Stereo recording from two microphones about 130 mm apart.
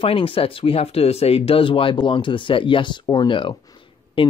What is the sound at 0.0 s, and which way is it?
Speech, 45° left (ahead or behind).